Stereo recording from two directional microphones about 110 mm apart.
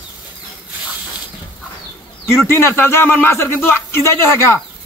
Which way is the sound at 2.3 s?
25° left (ahead or behind).